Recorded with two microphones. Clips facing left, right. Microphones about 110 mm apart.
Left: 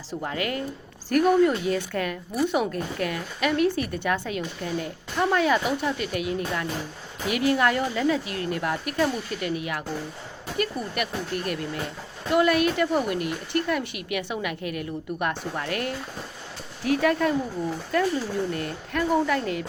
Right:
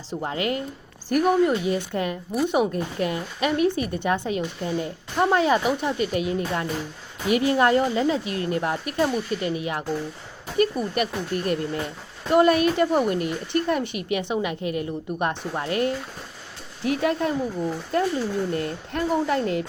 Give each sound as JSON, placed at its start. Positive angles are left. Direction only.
{"t": 0.1, "sound": "speech", "side_deg": -25}